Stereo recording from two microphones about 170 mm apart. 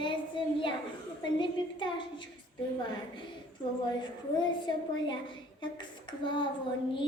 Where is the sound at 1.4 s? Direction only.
30° left (ahead or behind).